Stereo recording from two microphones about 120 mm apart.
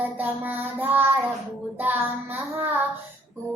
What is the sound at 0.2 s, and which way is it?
Speech, 15° right (ahead or behind).